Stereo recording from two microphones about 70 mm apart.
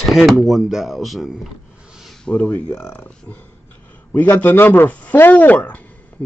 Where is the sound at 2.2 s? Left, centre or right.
Left.